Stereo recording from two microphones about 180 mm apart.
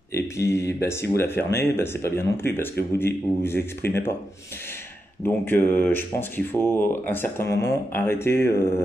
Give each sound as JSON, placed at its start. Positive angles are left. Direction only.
{"t": 0.1, "sound": "speech", "side_deg": 15}
{"t": 5.2, "sound": "speech", "side_deg": 10}